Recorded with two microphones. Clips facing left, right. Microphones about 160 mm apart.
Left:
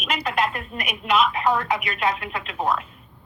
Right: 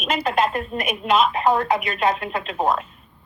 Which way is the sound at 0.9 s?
45° right (ahead or behind).